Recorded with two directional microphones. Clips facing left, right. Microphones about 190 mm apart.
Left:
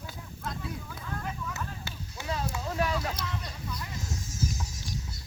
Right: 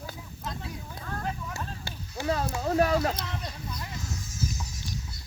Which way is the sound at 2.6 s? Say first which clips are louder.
Right 8 dB; 45° right (ahead or behind).